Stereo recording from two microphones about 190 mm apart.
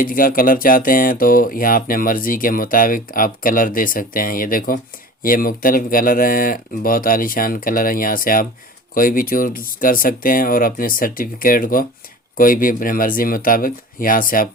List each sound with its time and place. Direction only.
0.0 s speech: 45° left (ahead or behind)